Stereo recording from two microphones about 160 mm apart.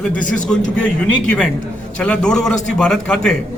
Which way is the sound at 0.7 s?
5° left (ahead or behind).